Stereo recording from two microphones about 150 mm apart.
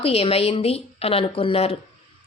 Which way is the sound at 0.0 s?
40° left (ahead or behind).